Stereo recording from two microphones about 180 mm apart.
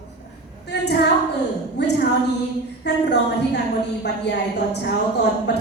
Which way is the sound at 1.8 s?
70° left (ahead or behind).